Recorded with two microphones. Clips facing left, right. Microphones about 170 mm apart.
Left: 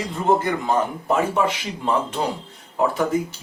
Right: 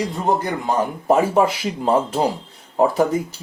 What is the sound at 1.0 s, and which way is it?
Speech, 35° right (ahead or behind).